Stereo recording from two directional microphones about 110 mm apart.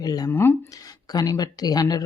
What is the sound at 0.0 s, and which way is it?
Speech, 35° left (ahead or behind).